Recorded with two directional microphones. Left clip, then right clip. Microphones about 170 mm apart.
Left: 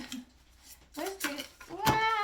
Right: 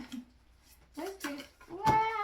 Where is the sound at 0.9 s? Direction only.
25° left (ahead or behind).